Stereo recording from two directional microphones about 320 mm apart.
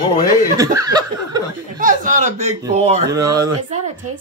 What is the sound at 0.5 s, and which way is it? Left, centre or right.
Speech, centre.